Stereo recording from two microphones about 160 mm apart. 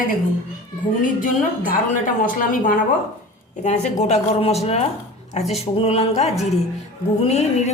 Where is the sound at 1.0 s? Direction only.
55° left (ahead or behind).